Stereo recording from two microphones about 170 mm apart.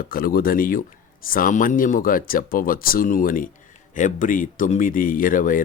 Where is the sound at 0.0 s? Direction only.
60° left (ahead or behind).